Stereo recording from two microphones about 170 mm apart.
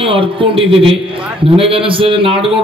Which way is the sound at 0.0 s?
30° right (ahead or behind).